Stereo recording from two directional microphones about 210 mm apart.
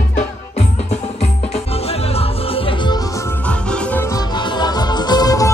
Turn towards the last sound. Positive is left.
turn(degrees=15)  # may be behind; listen again after turning